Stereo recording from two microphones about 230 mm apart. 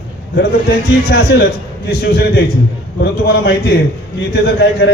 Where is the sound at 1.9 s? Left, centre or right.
Left.